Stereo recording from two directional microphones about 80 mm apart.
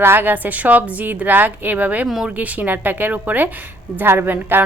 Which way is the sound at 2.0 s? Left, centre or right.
Centre.